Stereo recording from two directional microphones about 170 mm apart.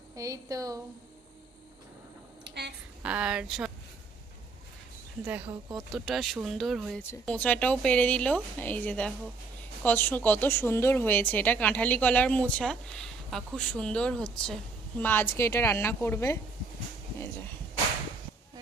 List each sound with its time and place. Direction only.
0.2 s a woman's voice: 20° right (ahead or behind)
2.4 s a sound: 80° right
3.0 s speech: 5° right (ahead or behind)
5.2 s speech: 10° right (ahead or behind)
7.0 s a woman's voice: 10° left (ahead or behind)